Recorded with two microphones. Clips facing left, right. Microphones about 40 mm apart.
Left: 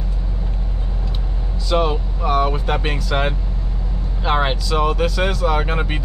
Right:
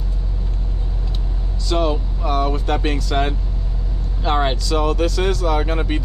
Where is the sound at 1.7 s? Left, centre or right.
Centre.